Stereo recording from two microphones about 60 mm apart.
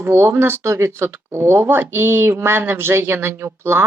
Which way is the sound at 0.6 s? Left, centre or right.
Right.